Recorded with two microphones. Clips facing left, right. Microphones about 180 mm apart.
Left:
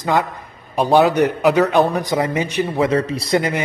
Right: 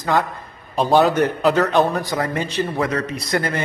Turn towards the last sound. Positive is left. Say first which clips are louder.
# left 5 dB
turn(degrees=30)  # may be behind; listen again after turning